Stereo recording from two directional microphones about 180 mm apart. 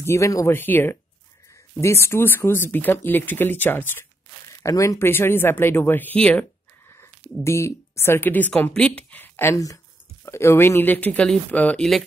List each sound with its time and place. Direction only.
0.0 s a woman's voice: 15° left (ahead or behind)